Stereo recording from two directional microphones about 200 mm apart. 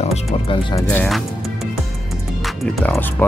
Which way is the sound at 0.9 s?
5° left (ahead or behind).